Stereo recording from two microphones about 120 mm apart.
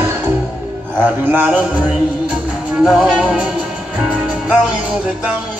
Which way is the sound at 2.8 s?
5° right (ahead or behind).